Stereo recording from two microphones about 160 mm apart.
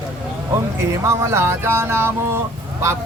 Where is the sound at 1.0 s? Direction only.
15° right (ahead or behind).